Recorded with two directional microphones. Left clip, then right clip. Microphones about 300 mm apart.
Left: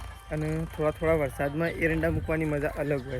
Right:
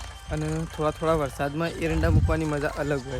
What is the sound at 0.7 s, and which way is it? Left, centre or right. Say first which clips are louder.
Speech: right 1 dB; centre.